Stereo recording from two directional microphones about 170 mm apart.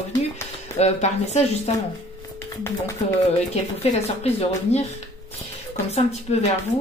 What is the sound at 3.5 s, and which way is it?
Speech, 40° left (ahead or behind).